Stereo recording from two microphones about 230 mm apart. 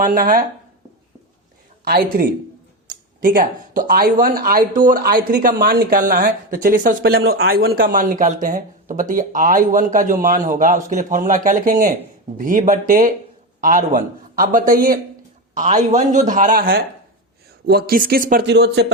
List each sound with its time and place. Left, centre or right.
0.0 s speech: right
1.8 s speech: right